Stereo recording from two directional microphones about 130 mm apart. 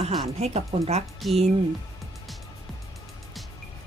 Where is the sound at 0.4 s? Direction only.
55° right (ahead or behind).